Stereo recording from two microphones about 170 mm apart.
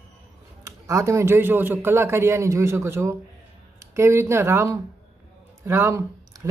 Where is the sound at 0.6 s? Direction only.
15° right (ahead or behind).